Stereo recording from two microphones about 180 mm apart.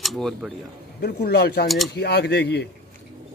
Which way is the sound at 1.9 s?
65° left (ahead or behind).